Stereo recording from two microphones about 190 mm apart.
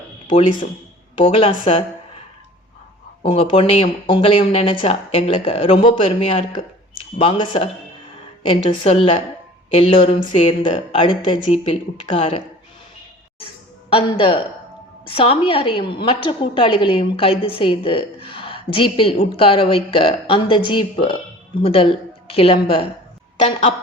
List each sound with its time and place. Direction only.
1.2 s speech: 30° left (ahead or behind)
3.2 s a woman's voice: 30° left (ahead or behind)
13.9 s a woman's voice: 30° left (ahead or behind)